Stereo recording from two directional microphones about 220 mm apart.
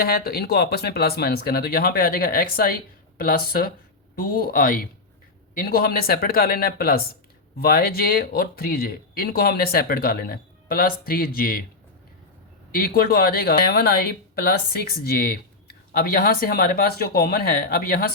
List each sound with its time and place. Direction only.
0.0 s speech: 45° left (ahead or behind)
12.7 s speech: 40° left (ahead or behind)